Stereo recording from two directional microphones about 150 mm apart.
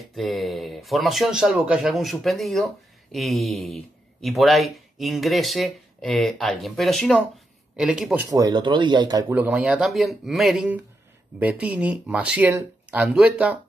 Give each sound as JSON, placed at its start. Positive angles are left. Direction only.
{"t": 0.0, "sound": "speech", "side_deg": 0}
{"t": 8.3, "sound": "speech", "side_deg": -25}
{"t": 9.3, "sound": "speech", "side_deg": -10}